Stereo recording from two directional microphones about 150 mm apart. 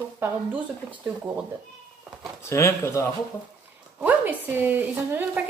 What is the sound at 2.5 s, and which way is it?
Speech, 20° left (ahead or behind).